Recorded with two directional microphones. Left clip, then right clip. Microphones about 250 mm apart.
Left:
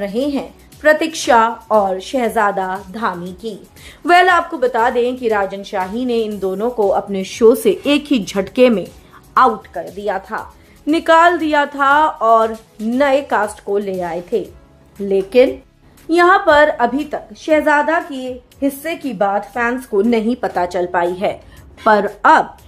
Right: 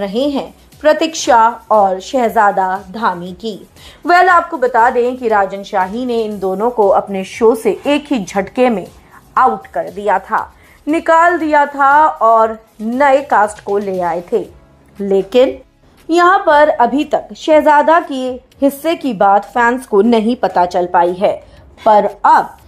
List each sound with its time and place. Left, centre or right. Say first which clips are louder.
0.0 s speech: right 3 dB; centre
6.9 s speech: right 4 dB; centre
8.4 s a woman's voice: even; centre
15.0 s a woman's voice: right 1 dB; centre